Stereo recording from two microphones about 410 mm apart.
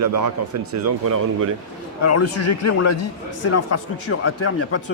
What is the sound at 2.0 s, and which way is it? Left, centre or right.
A man's voice, left.